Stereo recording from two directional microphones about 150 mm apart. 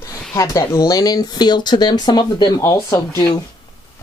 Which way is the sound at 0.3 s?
20° left (ahead or behind).